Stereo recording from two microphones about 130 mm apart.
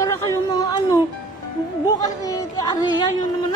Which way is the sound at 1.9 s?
25° left (ahead or behind).